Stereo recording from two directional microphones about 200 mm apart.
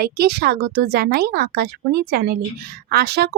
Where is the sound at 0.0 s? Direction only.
50° right (ahead or behind).